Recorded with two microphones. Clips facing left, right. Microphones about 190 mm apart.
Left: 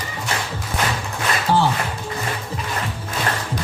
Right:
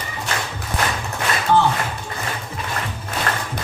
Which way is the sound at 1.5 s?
35° left (ahead or behind).